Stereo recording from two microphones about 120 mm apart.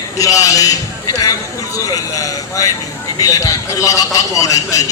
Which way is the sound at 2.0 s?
30° left (ahead or behind).